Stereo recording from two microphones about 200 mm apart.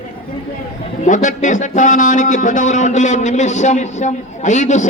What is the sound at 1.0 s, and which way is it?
A man's voice, 40° left (ahead or behind).